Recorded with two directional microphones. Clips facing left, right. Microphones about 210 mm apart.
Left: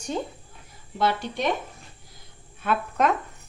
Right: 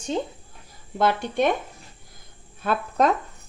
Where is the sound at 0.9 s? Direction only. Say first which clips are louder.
Right 4 dB; 50° right (ahead or behind).